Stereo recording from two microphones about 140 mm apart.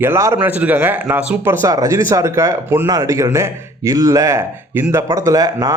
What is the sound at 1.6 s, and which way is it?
Speech, 25° right (ahead or behind).